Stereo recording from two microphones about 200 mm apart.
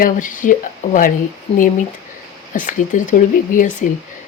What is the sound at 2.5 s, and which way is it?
A woman's voice, 40° left (ahead or behind).